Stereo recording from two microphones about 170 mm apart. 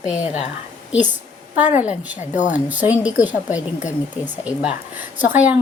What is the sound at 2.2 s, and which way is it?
Speech, 45° left (ahead or behind).